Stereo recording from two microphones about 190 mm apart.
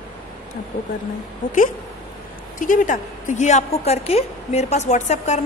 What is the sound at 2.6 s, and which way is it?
A woman's voice, 45° left (ahead or behind).